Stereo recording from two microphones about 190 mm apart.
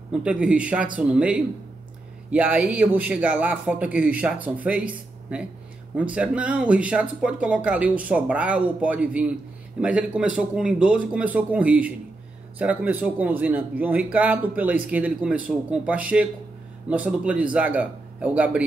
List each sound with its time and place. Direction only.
0.1 s speech: 5° right (ahead or behind)